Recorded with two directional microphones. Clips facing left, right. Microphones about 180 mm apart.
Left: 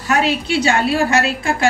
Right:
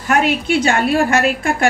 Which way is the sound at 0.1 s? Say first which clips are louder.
Right 2 dB; 50° right (ahead or behind).